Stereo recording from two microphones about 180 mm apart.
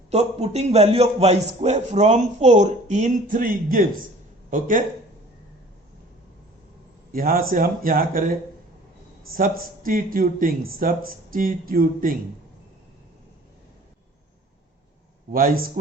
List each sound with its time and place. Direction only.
0.1 s a man's voice: 35° right (ahead or behind); by 4.0 s 50° right (ahead or behind)
7.1 s speech: 50° right (ahead or behind)
15.3 s speech: 50° right (ahead or behind)